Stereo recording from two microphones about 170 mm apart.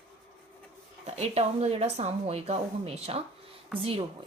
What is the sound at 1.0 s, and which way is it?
A woman's voice, 40° right (ahead or behind).